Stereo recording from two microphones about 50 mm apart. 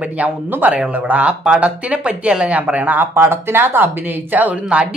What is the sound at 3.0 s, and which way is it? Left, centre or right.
Speech, right.